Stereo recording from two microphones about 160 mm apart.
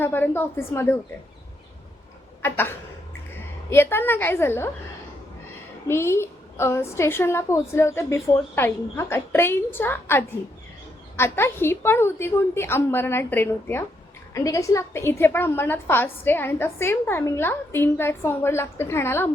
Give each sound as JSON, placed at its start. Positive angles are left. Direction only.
{"t": 0.0, "sound": "a woman's voice", "side_deg": 10}
{"t": 2.4, "sound": "a sound", "side_deg": 15}
{"t": 3.7, "sound": "a woman's voice", "side_deg": 15}
{"t": 5.9, "sound": "a woman's voice", "side_deg": 15}